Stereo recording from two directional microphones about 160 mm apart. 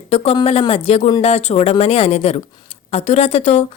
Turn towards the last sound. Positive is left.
turn(degrees=45)  # may be behind; listen again after turning